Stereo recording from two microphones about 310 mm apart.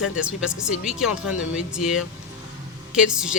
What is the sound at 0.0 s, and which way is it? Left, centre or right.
A woman's voice, centre.